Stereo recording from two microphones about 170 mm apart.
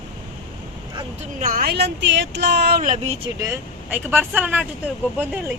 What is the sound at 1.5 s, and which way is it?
Speech, 60° right (ahead or behind).